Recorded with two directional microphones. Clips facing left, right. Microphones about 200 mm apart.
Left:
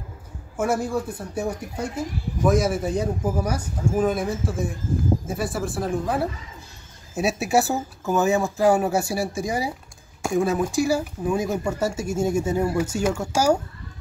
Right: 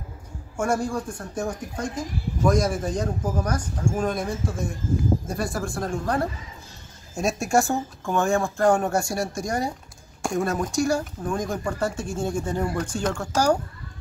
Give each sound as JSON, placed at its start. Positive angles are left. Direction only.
{"t": 0.6, "sound": "speech", "side_deg": 5}